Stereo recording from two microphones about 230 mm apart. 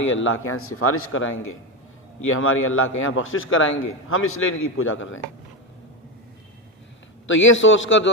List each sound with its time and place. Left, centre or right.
0.1 s a man's voice: left
7.3 s a man's voice: left